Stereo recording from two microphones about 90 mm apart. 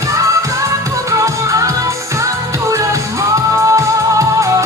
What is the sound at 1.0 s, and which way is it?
Music, 40° right (ahead or behind).